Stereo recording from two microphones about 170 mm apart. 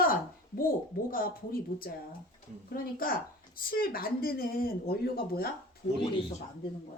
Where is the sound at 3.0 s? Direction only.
55° left (ahead or behind).